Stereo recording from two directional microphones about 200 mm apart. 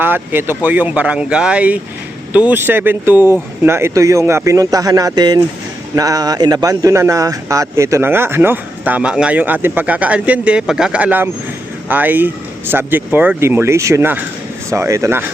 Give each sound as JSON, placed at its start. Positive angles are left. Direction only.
{"t": 0.0, "sound": "speech", "side_deg": -10}